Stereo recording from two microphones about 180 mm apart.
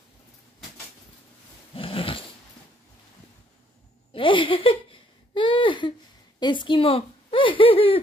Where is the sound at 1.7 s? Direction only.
30° left (ahead or behind).